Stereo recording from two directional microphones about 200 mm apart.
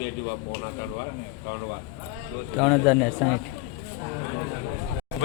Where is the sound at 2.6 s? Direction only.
Centre (ahead or behind).